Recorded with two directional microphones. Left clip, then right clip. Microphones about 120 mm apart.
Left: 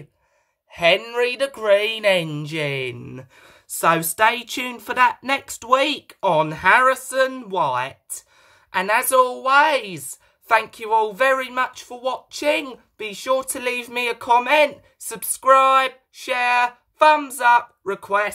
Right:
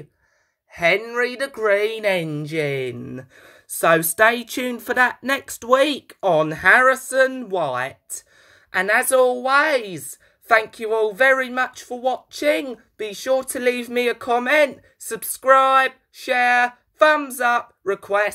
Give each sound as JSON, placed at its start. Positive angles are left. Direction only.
{"t": 0.7, "sound": "speech", "side_deg": 15}